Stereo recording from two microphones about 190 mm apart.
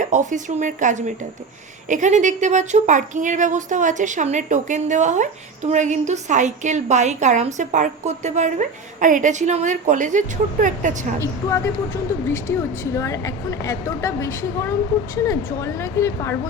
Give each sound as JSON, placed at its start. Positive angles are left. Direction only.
{"t": 0.0, "sound": "speech", "side_deg": -40}
{"t": 12.3, "sound": "speech", "side_deg": 15}